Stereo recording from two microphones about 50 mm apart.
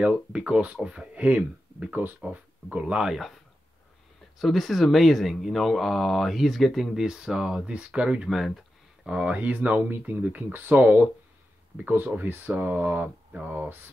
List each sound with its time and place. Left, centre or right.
0.3 s speech: right
2.2 s speech: right
3.1 s speech: centre
4.4 s speech: centre
7.0 s speech: centre; by 11.1 s right
12.2 s speech: right